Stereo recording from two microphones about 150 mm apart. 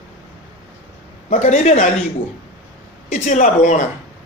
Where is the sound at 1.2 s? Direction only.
50° left (ahead or behind).